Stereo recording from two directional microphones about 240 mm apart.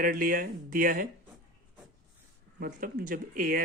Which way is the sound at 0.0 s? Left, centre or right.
Right.